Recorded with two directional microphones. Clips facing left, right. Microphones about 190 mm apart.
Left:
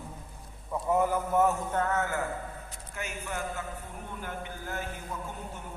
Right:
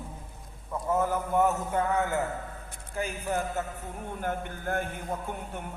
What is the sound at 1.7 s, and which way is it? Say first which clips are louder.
Speech: right 2 dB; 15° right (ahead or behind).